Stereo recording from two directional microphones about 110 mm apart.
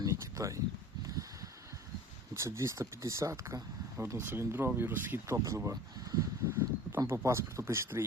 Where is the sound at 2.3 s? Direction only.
25° right (ahead or behind).